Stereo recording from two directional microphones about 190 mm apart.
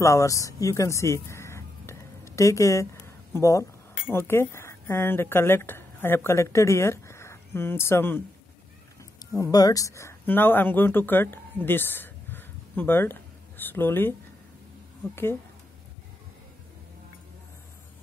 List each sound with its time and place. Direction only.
0.0 s speech: 15° left (ahead or behind)
9.2 s speech: 20° left (ahead or behind)